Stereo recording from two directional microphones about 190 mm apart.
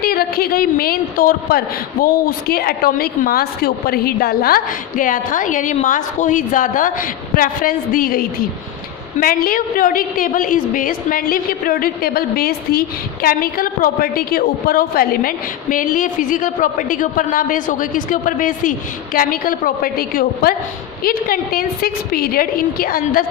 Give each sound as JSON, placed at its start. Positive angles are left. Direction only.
{"t": 0.0, "sound": "a woman's voice", "side_deg": 50}